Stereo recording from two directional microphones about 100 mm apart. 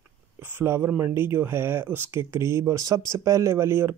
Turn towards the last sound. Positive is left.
turn(degrees=-25)  # may be behind; listen again after turning